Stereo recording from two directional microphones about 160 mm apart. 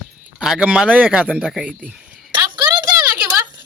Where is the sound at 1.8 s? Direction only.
5° right (ahead or behind).